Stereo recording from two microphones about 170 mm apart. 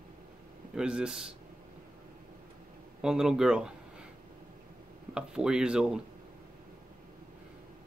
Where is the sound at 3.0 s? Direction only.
5° right (ahead or behind).